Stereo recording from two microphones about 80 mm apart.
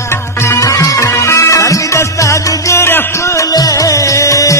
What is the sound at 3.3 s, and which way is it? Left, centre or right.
Music, left.